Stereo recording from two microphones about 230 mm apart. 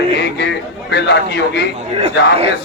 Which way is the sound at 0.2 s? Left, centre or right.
Left.